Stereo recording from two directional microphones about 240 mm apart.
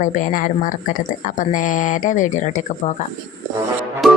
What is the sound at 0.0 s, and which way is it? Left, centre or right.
Speech, left.